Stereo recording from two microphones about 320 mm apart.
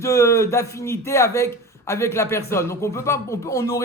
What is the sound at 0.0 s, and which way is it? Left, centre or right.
A man's voice, centre.